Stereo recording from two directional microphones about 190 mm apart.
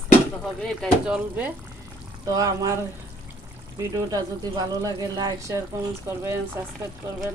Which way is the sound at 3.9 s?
20° right (ahead or behind).